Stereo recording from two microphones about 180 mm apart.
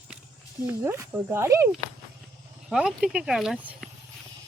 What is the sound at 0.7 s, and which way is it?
Speech, 15° right (ahead or behind).